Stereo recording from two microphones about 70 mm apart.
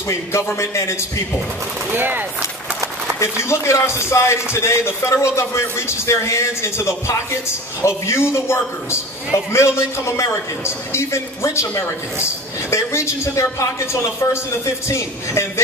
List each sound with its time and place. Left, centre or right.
0.6 s a woman's voice: left
1.9 s speech: right
3.2 s a woman's voice: left